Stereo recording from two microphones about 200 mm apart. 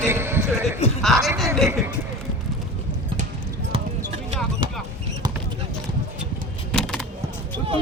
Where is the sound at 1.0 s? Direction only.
Centre (ahead or behind).